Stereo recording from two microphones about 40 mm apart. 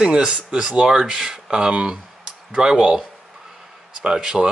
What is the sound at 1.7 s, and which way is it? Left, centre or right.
Speech, right.